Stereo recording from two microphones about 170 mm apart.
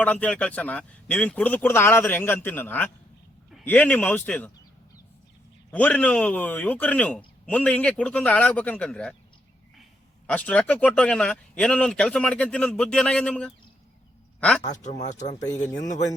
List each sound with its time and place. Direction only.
0.0 s a man's voice: 10° left (ahead or behind)
5.7 s a man's voice: 10° left (ahead or behind)
10.2 s a man's voice: 5° left (ahead or behind)
14.7 s speech: 45° left (ahead or behind)